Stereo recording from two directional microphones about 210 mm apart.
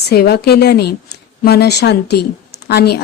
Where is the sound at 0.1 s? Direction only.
50° left (ahead or behind).